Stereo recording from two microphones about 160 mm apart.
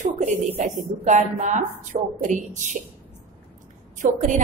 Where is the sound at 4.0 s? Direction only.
55° right (ahead or behind).